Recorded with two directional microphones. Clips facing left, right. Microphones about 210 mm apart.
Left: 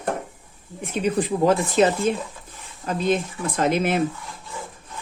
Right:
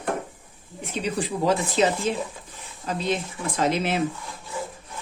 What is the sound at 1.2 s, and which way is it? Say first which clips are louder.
Speech: left 3 dB; 50° left (ahead or behind).